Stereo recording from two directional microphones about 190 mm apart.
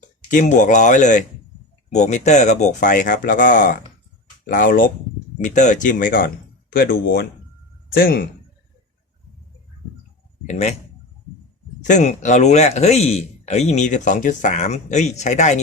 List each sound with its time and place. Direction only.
0.3 s speech: 40° left (ahead or behind)
10.4 s speech: 35° left (ahead or behind)
11.8 s speech: 40° left (ahead or behind)